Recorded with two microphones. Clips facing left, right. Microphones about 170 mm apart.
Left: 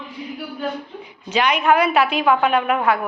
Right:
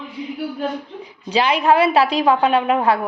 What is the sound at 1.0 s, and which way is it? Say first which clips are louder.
A woman's voice: right 1 dB; 30° right (ahead or behind).